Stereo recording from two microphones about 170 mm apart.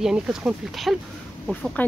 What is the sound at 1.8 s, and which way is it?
Speech, 10° left (ahead or behind).